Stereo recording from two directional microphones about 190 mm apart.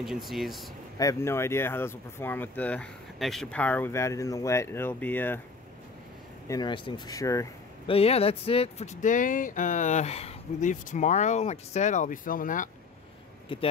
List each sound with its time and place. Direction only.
0.0 s speech: centre (ahead or behind)
0.9 s speech: 15° left (ahead or behind)
6.4 s speech: 20° left (ahead or behind)
7.8 s speech: 30° left (ahead or behind)
13.5 s speech: 25° left (ahead or behind)